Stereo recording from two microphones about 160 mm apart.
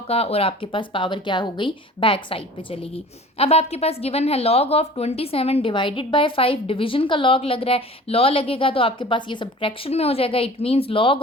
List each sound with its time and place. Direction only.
0.1 s a woman's voice: 40° left (ahead or behind)